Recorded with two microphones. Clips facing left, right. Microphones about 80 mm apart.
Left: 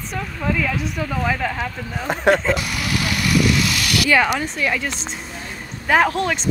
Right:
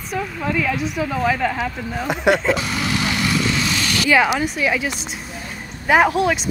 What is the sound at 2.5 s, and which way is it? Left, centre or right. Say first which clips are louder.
Vehicle: right 1 dB; right.